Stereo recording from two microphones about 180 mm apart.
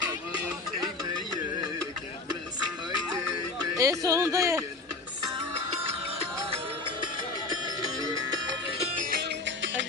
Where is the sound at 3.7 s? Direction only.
20° right (ahead or behind).